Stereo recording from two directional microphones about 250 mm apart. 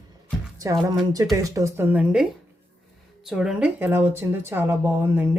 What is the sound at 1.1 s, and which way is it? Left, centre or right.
Speech, centre.